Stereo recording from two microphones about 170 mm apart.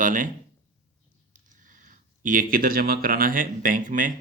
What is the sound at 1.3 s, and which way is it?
Speech, 50° right (ahead or behind).